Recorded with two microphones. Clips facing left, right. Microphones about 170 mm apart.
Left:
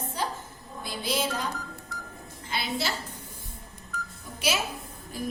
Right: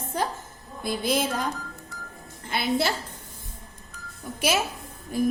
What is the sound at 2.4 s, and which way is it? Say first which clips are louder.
Speech: right 6 dB; 55° right (ahead or behind).